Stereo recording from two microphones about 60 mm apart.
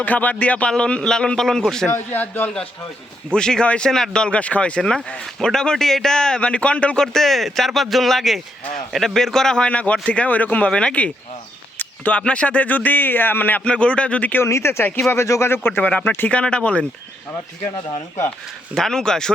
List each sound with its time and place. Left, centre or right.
0.0 s a man's voice: left; by 1.9 s centre
2.1 s speech: left
3.3 s a man's voice: centre
4.8 s a man's voice: centre
7.0 s a man's voice: centre
9.6 s a man's voice: left
11.8 s a sound: left
12.2 s speech: centre
13.7 s speech: centre
14.4 s speech: left
15.8 s speech: left
16.4 s a man's voice: centre
18.7 s a man's voice: centre